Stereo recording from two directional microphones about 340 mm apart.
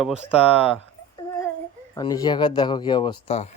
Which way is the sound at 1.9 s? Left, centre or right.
Centre.